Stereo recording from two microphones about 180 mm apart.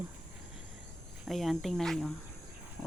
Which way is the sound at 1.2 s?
Centre (ahead or behind).